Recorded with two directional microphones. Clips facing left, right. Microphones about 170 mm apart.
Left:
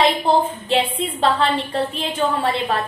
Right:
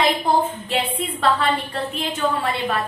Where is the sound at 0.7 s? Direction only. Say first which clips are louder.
Left 4 dB; 30° left (ahead or behind).